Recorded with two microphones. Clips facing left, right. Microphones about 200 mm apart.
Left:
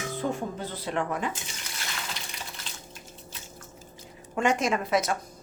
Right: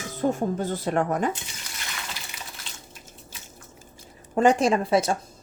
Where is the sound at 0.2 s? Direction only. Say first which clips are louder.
Right 8 dB; 45° right (ahead or behind).